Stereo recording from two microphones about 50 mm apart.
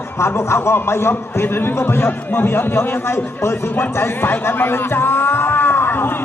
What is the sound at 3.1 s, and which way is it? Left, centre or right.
Speech, left.